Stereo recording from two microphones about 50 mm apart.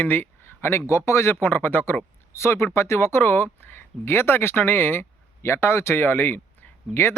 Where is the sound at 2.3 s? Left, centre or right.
Left.